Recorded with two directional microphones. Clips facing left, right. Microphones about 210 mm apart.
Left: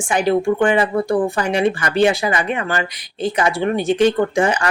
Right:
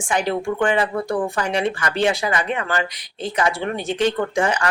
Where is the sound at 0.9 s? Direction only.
25° left (ahead or behind).